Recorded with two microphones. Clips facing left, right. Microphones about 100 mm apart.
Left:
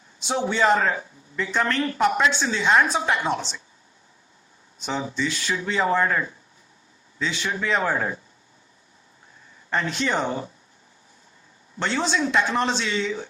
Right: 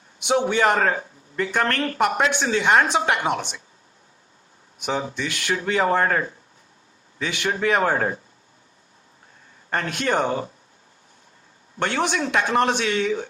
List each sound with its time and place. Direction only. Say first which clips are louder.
0.2 s speech: right 3 dB; 60° right (ahead or behind)
4.8 s speech: right 1 dB; 55° right (ahead or behind)
9.6 s speech: right 1 dB; 55° right (ahead or behind)
11.8 s speech: right 1 dB; 55° right (ahead or behind)